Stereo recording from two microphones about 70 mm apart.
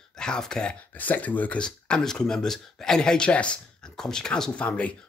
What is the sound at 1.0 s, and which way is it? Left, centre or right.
Speech, left.